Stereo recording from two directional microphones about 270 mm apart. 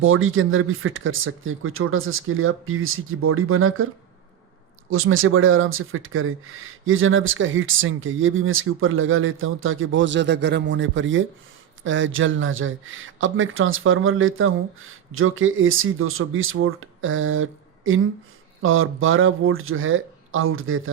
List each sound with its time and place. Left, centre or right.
0.0 s speech: right
4.9 s speech: right